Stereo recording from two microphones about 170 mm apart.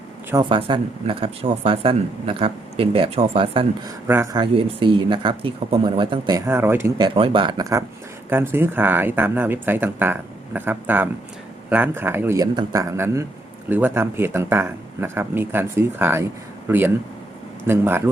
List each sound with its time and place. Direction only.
0.4 s speech: 30° right (ahead or behind)
4.0 s speech: 15° right (ahead or behind)
4.4 s speech: 30° right (ahead or behind); by 6.9 s 15° right (ahead or behind)
7.0 s speech: 25° right (ahead or behind)